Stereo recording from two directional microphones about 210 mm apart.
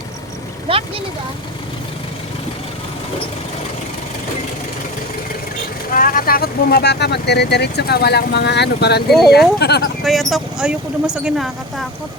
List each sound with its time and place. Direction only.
0.7 s speech: 25° right (ahead or behind)
5.9 s speech: 40° left (ahead or behind)
9.0 s speech: centre (ahead or behind)
9.6 s speech: 50° left (ahead or behind)
10.0 s speech: centre (ahead or behind)